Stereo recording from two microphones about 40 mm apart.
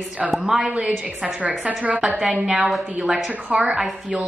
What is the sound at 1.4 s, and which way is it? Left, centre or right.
Speech, right.